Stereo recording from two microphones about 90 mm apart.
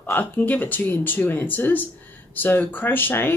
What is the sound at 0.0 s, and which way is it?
Speech, 20° left (ahead or behind).